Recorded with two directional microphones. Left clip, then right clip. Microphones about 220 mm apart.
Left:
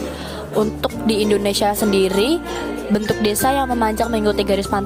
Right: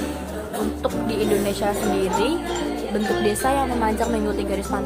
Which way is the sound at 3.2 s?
45° left (ahead or behind).